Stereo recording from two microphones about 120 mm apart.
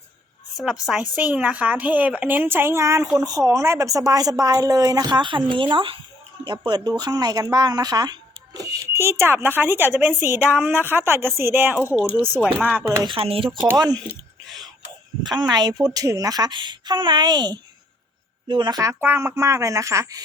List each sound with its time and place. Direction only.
0.5 s a woman's voice: 5° right (ahead or behind)
13.1 s speech: 50° right (ahead or behind)
13.7 s a woman's voice: 35° right (ahead or behind)
15.2 s a woman's voice: 40° right (ahead or behind)
18.8 s speech: 20° right (ahead or behind)